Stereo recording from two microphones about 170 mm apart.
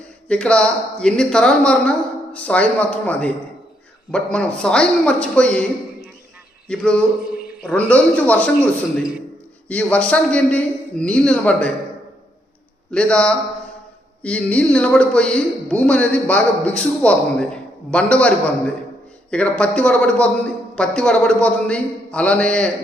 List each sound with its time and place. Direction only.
0.3 s speech: 5° left (ahead or behind)
6.7 s speech: 5° left (ahead or behind)
7.3 s a sound: 5° right (ahead or behind)
7.9 s speech: 5° left (ahead or behind)
9.6 s speech: 10° left (ahead or behind)
12.9 s speech: 5° left (ahead or behind)